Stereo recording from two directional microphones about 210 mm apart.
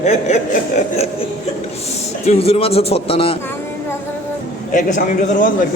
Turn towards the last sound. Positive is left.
turn(degrees=40)  # may be behind; listen again after turning